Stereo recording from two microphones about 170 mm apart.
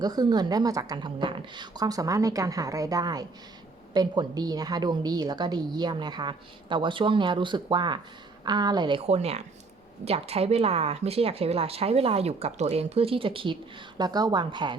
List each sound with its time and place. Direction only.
0.0 s a woman's voice: 25° right (ahead or behind)